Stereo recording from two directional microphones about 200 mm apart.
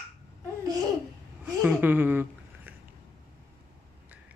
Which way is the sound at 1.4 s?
5° right (ahead or behind).